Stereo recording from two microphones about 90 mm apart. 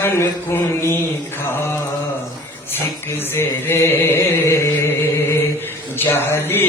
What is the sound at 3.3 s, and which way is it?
Chant, 25° left (ahead or behind).